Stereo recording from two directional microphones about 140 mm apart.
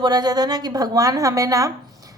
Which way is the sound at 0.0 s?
30° right (ahead or behind).